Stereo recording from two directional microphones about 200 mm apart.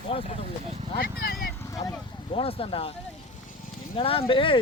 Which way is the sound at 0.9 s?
50° left (ahead or behind).